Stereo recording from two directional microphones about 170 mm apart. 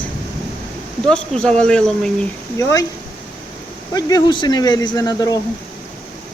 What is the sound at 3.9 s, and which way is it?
Speech, 20° left (ahead or behind).